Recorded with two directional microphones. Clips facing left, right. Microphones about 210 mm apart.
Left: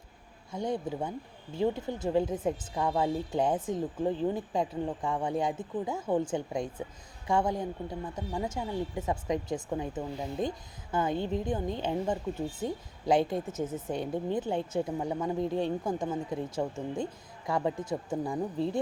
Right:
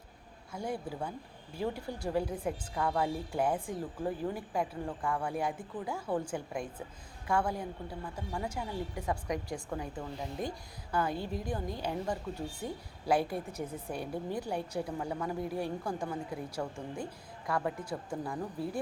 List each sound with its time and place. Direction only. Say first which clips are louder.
0.5 s a woman's voice: left 5 dB; 20° left (ahead or behind)